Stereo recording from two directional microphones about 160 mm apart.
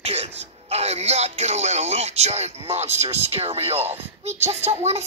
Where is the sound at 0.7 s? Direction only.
40° right (ahead or behind).